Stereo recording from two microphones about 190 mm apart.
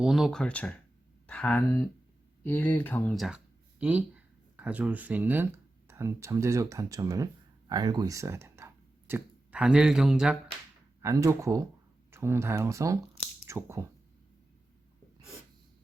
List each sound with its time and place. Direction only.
0.0 s speech: centre (ahead or behind)
11.0 s speech: 15° right (ahead or behind)